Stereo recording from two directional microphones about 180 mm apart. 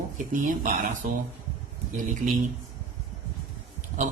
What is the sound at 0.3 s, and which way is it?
Speech, 45° right (ahead or behind).